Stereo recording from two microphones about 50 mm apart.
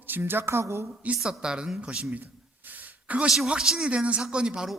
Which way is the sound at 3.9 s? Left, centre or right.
Right.